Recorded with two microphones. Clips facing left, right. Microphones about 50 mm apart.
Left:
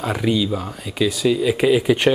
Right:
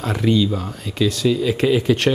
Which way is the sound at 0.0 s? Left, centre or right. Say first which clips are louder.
Right 2 dB; centre.